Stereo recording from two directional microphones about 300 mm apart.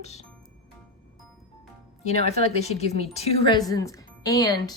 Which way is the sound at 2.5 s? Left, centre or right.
Left.